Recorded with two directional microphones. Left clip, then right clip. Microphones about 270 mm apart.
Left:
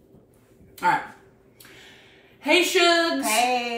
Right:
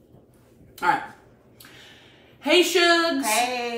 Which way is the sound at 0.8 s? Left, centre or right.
Centre.